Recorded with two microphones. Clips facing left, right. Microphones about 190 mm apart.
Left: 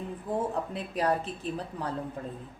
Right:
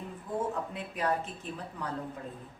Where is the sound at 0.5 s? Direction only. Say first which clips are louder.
Left 4 dB; 35° left (ahead or behind).